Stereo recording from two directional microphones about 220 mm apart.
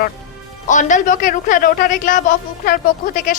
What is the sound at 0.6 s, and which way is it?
A man's voice, 35° left (ahead or behind).